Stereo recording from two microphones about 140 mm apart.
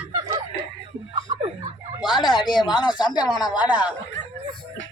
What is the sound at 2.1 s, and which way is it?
Speech, 35° left (ahead or behind).